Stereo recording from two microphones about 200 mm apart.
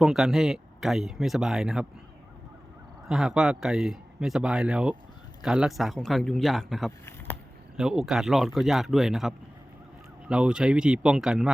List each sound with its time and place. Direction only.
0.0 s speech: centre (ahead or behind)
3.1 s speech: centre (ahead or behind)